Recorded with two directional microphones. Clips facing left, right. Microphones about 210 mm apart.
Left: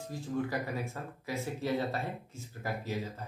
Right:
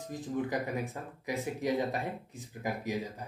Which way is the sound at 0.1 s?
20° right (ahead or behind).